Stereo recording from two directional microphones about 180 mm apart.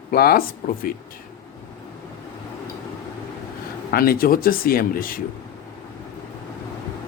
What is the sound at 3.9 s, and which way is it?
Speech, 55° left (ahead or behind).